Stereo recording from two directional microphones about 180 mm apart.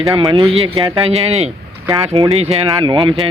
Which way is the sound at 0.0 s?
25° right (ahead or behind).